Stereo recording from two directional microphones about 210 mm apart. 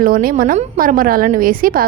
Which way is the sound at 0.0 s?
45° right (ahead or behind).